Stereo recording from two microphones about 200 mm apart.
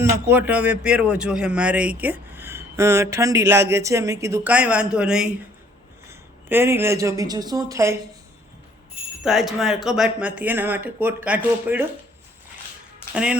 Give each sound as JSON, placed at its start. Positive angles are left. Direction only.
{"t": 0.0, "sound": "speech", "side_deg": -10}
{"t": 9.2, "sound": "speech", "side_deg": 0}